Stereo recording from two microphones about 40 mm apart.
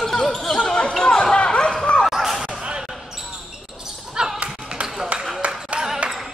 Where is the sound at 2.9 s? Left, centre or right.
Centre.